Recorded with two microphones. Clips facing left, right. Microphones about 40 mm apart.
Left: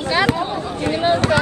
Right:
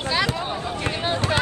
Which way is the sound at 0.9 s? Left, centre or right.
Left.